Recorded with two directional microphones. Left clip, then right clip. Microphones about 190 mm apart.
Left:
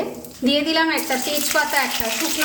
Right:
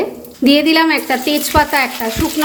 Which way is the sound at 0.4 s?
40° right (ahead or behind).